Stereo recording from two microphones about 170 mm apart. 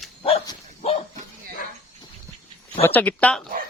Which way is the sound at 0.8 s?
35° left (ahead or behind).